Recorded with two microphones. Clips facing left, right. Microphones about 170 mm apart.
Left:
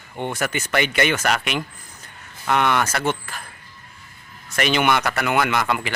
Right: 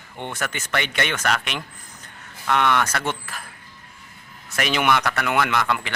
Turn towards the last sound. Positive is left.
turn(degrees=10)  # may be behind; listen again after turning